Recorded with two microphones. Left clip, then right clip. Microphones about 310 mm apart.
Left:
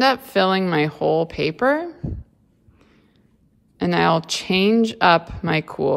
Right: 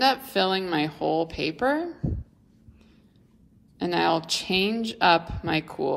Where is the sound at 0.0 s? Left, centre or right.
Left.